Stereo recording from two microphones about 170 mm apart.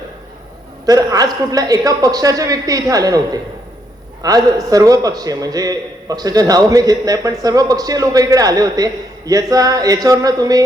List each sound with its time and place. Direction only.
0.9 s a man's voice: 20° right (ahead or behind)